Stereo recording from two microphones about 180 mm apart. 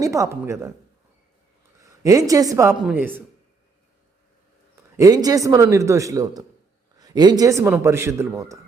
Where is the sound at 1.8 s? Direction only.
20° right (ahead or behind).